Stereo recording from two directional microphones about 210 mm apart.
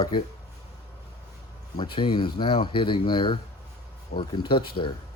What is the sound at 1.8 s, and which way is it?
Speech, 25° left (ahead or behind).